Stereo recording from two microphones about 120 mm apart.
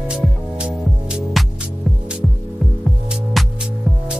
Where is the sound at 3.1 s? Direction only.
Centre (ahead or behind).